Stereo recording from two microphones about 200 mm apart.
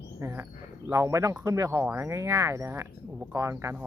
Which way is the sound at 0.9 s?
15° right (ahead or behind).